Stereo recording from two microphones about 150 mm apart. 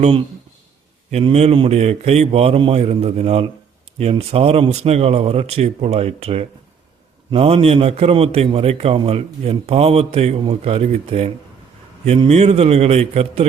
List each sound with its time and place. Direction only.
0.0 s a man's voice: 40° right (ahead or behind)